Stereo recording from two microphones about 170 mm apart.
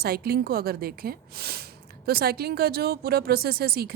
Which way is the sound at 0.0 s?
65° right (ahead or behind).